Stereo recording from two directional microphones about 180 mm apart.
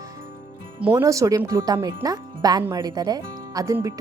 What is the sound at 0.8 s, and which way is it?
Speech, 10° right (ahead or behind).